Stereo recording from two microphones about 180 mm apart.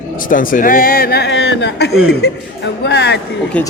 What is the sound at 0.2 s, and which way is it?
A man's voice, 50° left (ahead or behind).